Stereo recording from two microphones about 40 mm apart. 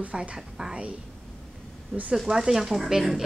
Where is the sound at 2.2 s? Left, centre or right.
Centre.